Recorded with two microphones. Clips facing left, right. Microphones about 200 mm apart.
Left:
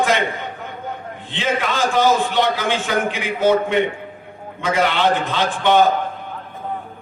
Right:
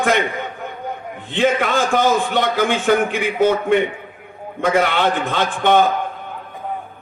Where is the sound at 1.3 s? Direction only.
50° right (ahead or behind).